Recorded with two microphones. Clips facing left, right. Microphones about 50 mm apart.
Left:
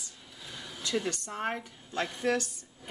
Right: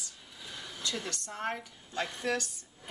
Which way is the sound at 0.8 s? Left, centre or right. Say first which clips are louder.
Left 6 dB; centre.